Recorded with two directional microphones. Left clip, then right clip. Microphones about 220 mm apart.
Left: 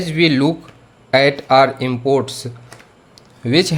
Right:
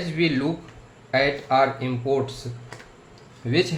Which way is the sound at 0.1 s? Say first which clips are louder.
Left 9 dB; 40° left (ahead or behind).